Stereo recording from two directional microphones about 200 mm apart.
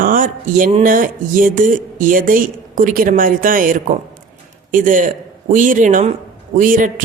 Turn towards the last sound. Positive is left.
turn(degrees=-45)  # may be behind; listen again after turning